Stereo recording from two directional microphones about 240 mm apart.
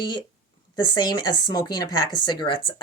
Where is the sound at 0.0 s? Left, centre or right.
Centre.